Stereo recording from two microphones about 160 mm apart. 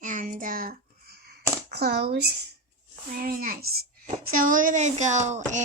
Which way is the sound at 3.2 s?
65° right (ahead or behind).